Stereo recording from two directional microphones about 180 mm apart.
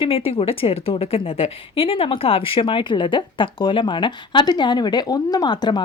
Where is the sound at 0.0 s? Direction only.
30° left (ahead or behind).